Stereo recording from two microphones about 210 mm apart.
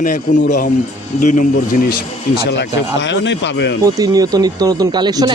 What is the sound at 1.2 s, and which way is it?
Speech, 35° left (ahead or behind).